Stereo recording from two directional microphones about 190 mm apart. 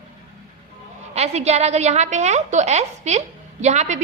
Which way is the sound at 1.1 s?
35° right (ahead or behind).